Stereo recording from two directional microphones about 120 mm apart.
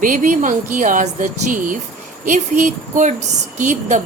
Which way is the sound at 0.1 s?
90° right.